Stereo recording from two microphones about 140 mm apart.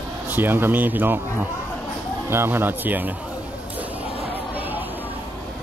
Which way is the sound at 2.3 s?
15° right (ahead or behind).